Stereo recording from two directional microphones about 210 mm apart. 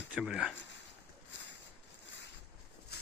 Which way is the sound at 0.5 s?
60° left (ahead or behind).